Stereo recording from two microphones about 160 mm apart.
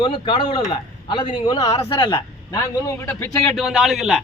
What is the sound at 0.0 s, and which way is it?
Speech, 30° left (ahead or behind).